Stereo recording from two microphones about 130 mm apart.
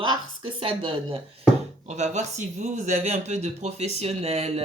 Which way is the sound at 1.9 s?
60° right (ahead or behind).